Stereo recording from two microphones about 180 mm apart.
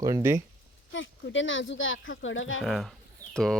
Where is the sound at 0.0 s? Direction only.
15° right (ahead or behind).